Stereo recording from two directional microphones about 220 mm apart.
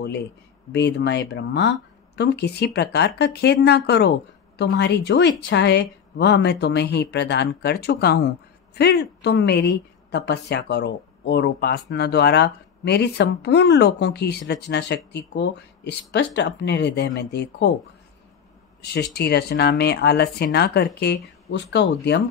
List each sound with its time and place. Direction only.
0.7 s a woman's voice: 50° left (ahead or behind)
18.8 s a woman's voice: 50° left (ahead or behind)